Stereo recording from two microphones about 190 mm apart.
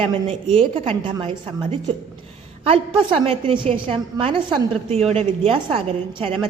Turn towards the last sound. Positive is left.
turn(degrees=-30)  # may be behind; listen again after turning